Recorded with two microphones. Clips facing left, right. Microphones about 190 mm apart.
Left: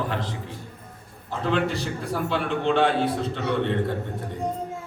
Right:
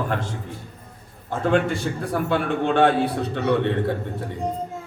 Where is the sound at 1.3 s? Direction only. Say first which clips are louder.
Right 4 dB; 50° right (ahead or behind).